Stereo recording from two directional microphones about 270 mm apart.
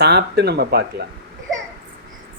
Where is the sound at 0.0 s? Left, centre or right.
Right.